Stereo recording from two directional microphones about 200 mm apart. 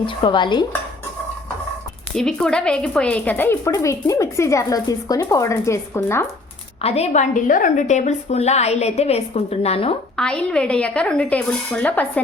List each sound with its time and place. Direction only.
0.0 s dishes: 25° left (ahead or behind)
2.1 s a woman's voice: 5° left (ahead or behind)
6.8 s a woman's voice: 30° left (ahead or behind)
10.2 s speech: 5° left (ahead or behind)